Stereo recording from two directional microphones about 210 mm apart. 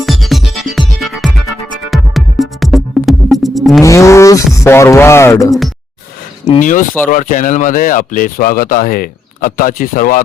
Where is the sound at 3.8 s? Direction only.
15° left (ahead or behind).